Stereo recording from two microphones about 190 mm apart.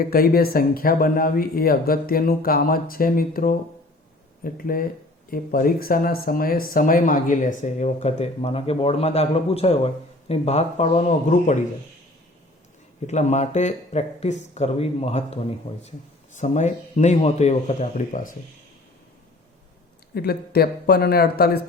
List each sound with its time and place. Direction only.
0.0 s speech: 50° left (ahead or behind)
13.1 s speech: 35° left (ahead or behind)
20.1 s speech: 55° left (ahead or behind)